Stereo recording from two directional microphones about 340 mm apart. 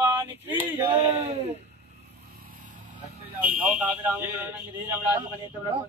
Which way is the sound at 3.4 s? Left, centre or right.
Centre.